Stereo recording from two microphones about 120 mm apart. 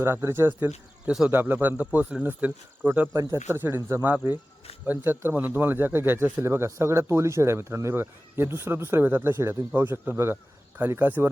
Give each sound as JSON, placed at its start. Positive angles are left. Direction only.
{"t": 0.0, "sound": "speech", "side_deg": -20}
{"t": 1.0, "sound": "speech", "side_deg": -5}
{"t": 1.3, "sound": "speech", "side_deg": -15}
{"t": 3.2, "sound": "speech", "side_deg": -25}